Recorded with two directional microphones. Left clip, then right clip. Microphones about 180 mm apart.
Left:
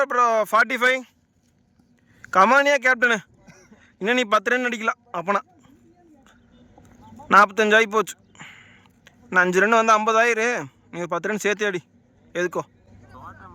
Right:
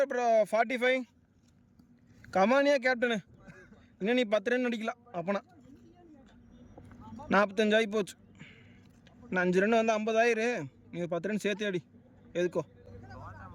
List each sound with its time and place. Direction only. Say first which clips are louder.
0.0 s a man's voice: left 7 dB; 5° right (ahead or behind)
2.3 s a man's voice: left 9 dB; centre (ahead or behind)
7.3 s a man's voice: left 12 dB; centre (ahead or behind)
13.1 s vehicle: left 8 dB; 45° right (ahead or behind)